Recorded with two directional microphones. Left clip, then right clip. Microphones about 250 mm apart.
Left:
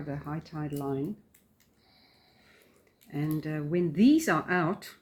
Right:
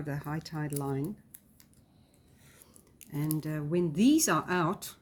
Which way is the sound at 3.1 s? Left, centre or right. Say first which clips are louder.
Left 2 dB; right.